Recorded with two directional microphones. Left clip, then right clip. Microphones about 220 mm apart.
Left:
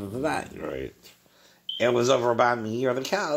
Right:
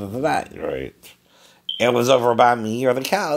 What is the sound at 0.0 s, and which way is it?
Speech, 40° right (ahead or behind).